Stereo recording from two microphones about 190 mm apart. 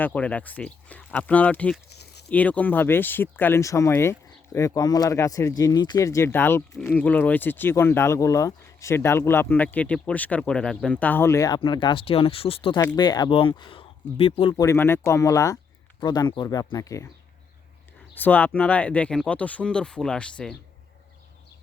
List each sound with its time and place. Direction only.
0.0 s speech: 10° left (ahead or behind)
1.9 s a sound: 60° left (ahead or behind)
2.3 s speech: 10° left (ahead or behind); by 14.5 s 30° left (ahead or behind)
14.5 s speech: 15° left (ahead or behind)
18.1 s speech: 10° left (ahead or behind)